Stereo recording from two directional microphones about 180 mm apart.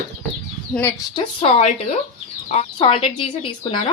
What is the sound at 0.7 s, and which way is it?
Speech, 10° left (ahead or behind).